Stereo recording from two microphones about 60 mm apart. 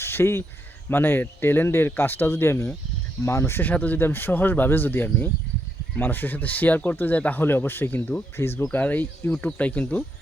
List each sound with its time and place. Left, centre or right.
0.0 s speech: left
3.6 s speech: left
8.7 s speech: left